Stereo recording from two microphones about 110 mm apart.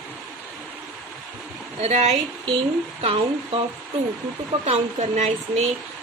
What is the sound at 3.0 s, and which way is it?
Speech, 55° right (ahead or behind).